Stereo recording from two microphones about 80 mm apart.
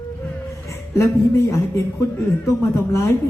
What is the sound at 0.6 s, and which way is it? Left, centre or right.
A man's voice, left.